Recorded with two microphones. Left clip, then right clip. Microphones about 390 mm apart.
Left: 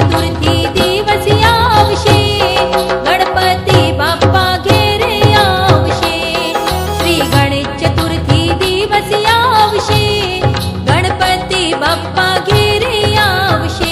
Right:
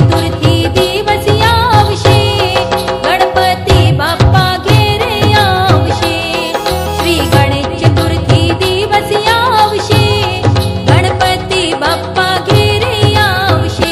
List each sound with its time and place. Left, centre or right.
1.3 s music: centre
4.4 s music: centre
9.2 s music: centre
11.5 s music: centre